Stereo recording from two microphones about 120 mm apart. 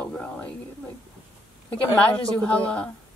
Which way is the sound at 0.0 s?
10° left (ahead or behind).